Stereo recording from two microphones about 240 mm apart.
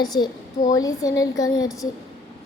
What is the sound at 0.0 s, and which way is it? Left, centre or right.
A child's voice, centre.